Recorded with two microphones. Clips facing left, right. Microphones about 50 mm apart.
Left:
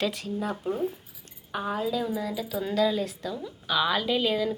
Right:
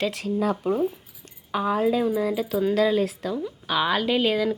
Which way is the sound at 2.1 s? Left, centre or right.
Right.